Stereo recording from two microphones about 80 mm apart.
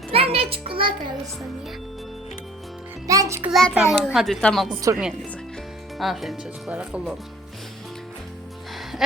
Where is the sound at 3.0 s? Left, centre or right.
Right.